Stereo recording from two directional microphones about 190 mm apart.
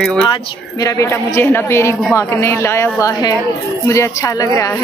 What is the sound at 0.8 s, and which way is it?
Speech, 15° left (ahead or behind).